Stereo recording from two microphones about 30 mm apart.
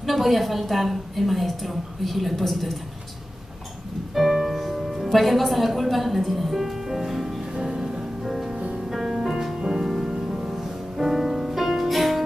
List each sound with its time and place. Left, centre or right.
0.0 s a woman's voice: centre
4.1 s music: centre
7.6 s music: centre